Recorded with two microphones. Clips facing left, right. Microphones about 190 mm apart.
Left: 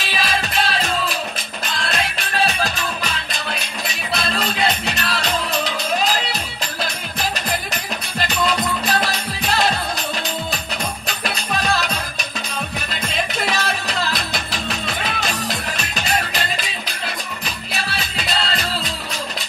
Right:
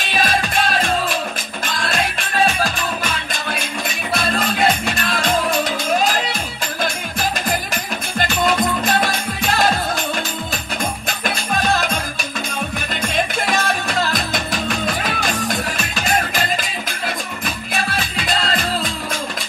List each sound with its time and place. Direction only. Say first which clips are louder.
0.1 s music: right 4 dB; 45° right (ahead or behind)
3.8 s music: right 2 dB; 50° right (ahead or behind)
8.2 s music: right 3 dB; 45° right (ahead or behind)
13.1 s music: right 2 dB; 45° right (ahead or behind)
17.9 s music: right 2 dB; 45° right (ahead or behind)